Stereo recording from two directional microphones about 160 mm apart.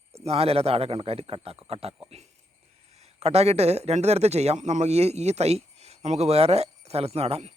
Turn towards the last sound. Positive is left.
turn(degrees=-40)  # may be behind; listen again after turning